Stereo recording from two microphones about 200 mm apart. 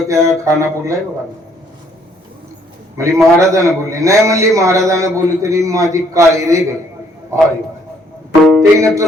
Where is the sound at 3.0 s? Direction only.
15° right (ahead or behind).